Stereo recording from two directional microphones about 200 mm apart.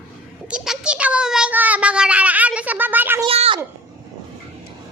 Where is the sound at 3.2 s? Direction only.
30° right (ahead or behind).